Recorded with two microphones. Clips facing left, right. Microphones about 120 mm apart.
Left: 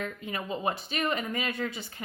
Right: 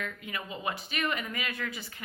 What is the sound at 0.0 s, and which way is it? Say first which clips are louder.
A woman's voice: left 3 dB; 35° left (ahead or behind).